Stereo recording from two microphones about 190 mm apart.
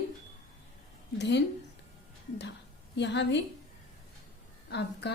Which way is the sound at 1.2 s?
65° left (ahead or behind).